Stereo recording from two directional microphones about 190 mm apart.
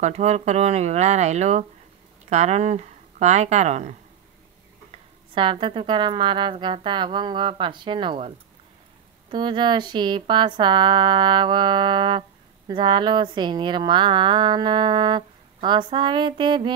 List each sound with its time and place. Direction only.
0.0 s speech: 35° right (ahead or behind)
5.3 s speech: 25° right (ahead or behind)
9.3 s speech: 25° right (ahead or behind)